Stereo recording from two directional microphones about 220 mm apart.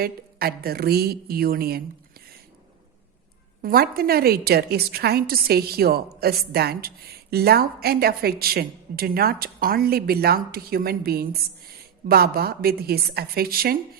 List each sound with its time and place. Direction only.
0.0 s a woman's voice: 45° right (ahead or behind)
3.6 s a woman's voice: 40° right (ahead or behind)